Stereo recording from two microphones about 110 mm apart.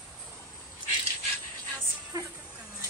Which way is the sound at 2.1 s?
35° right (ahead or behind).